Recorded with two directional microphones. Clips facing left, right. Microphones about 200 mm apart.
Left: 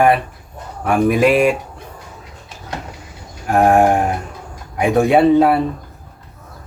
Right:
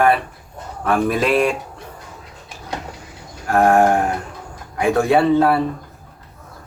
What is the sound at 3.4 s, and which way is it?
A man's voice, 15° left (ahead or behind).